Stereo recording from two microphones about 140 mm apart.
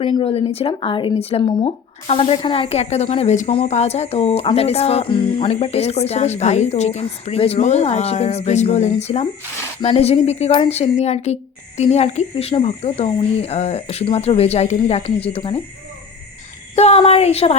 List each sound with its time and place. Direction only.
0.2 s speech: 45° left (ahead or behind)
16.7 s speech: 50° left (ahead or behind)